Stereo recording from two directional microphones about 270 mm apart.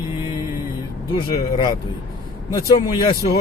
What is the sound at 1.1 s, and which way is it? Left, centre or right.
Speech, centre.